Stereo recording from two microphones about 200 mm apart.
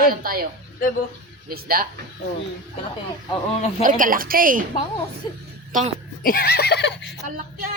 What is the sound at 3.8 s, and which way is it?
Speech, 40° right (ahead or behind).